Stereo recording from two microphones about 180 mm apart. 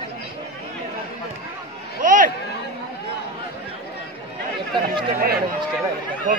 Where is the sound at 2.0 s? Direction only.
45° right (ahead or behind).